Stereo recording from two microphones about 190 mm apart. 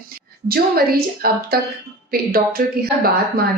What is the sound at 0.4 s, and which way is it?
A woman's voice, 55° right (ahead or behind).